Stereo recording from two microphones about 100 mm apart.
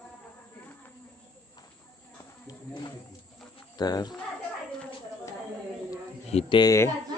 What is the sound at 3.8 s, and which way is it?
Speech, 45° left (ahead or behind).